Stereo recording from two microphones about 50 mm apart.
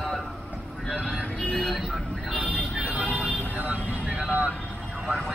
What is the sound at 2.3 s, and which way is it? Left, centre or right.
Vehicle, right.